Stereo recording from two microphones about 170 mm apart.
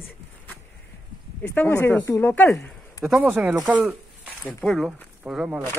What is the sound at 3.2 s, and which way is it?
Speech, 10° right (ahead or behind).